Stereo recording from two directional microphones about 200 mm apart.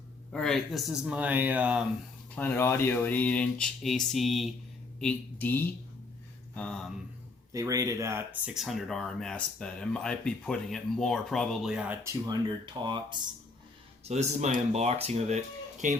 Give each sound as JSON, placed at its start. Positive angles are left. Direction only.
{"t": 0.3, "sound": "speech", "side_deg": 5}
{"t": 2.3, "sound": "speech", "side_deg": 10}
{"t": 7.5, "sound": "speech", "side_deg": -15}
{"t": 14.0, "sound": "speech", "side_deg": -35}